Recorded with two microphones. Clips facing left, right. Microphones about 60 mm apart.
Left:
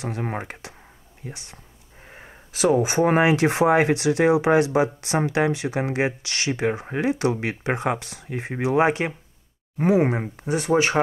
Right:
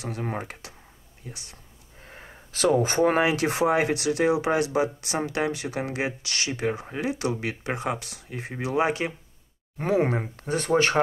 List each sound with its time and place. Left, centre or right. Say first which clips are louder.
0.0 s speech: left 3 dB; left
2.0 s a sound: left 1 dB; centre
3.0 s speech: left 3 dB; left
9.8 s speech: left 4 dB; centre